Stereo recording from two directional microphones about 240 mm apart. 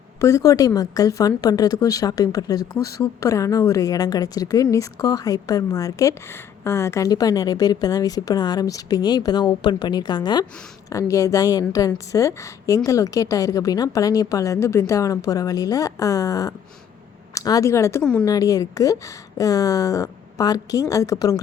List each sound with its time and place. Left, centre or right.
0.2 s speech: centre
18.3 s speech: centre